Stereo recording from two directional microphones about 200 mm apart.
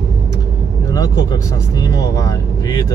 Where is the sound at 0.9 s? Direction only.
15° left (ahead or behind).